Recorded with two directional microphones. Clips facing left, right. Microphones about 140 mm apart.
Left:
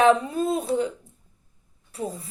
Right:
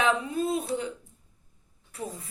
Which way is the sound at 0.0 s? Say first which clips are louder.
Left 7 dB; 40° left (ahead or behind).